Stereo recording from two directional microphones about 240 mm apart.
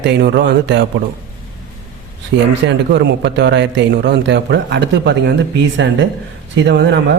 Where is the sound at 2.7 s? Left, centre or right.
Right.